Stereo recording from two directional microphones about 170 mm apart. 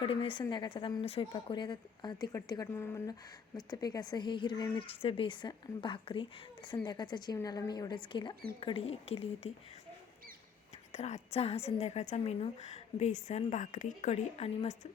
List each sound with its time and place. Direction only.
0.0 s a woman's voice: 30° left (ahead or behind)
10.9 s a woman's voice: 40° left (ahead or behind)